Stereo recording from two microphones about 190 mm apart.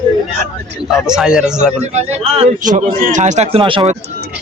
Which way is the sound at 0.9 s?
5° right (ahead or behind).